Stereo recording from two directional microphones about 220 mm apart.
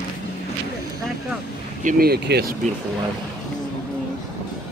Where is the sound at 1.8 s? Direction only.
45° right (ahead or behind).